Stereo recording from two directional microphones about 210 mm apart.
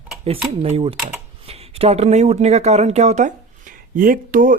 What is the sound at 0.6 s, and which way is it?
Speech, 25° right (ahead or behind).